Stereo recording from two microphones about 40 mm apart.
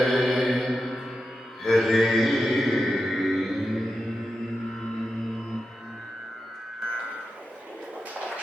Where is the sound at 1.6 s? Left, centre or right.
Centre.